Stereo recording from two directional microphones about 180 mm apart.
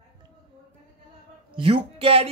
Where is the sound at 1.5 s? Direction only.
30° right (ahead or behind).